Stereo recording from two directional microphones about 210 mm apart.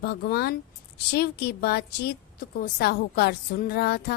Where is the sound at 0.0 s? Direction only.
50° left (ahead or behind).